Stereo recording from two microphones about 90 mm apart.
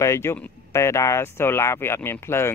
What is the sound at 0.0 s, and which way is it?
Speech, 35° left (ahead or behind).